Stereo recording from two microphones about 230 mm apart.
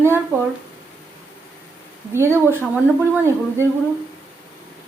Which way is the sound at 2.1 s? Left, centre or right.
Centre.